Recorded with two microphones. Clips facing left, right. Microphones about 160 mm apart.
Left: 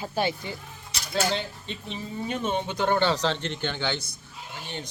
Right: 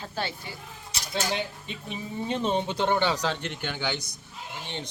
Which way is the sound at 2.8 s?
15° right (ahead or behind).